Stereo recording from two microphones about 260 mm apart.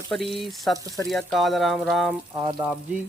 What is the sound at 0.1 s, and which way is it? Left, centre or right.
Speech, centre.